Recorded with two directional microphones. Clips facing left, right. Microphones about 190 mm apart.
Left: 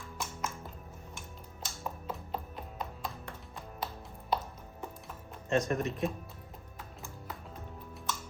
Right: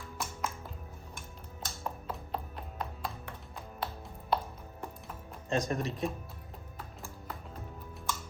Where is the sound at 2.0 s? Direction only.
Centre (ahead or behind).